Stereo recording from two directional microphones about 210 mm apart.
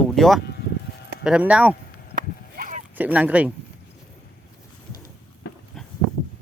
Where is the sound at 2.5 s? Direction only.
40° right (ahead or behind).